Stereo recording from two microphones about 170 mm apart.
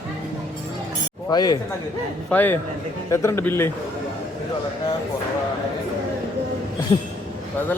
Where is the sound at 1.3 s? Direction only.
25° left (ahead or behind).